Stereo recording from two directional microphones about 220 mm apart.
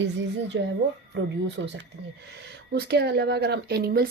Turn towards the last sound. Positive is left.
turn(degrees=-45)  # may be behind; listen again after turning